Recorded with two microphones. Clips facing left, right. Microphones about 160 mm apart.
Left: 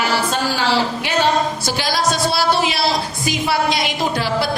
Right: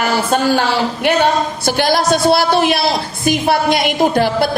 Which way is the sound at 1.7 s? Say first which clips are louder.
Right 6 dB; 55° right (ahead or behind).